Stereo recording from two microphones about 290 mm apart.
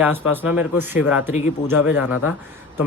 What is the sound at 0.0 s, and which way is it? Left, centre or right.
Speech, centre.